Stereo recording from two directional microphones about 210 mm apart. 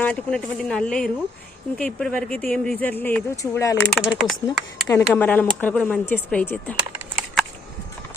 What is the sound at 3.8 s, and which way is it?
A woman's voice, centre (ahead or behind).